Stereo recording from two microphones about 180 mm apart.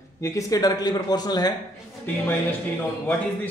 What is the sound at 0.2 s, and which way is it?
Speech, 15° left (ahead or behind).